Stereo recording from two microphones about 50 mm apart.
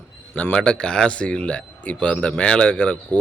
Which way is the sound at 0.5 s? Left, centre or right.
Centre.